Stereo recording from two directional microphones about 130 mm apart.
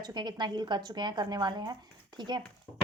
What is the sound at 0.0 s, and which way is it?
Speech, 35° right (ahead or behind).